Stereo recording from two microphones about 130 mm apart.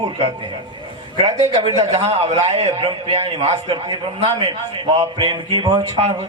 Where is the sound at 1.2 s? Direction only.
55° right (ahead or behind).